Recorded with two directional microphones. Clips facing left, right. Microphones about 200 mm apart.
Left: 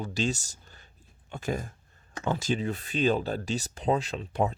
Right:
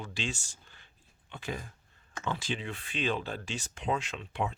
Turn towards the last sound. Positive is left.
turn(degrees=40)  # may be behind; listen again after turning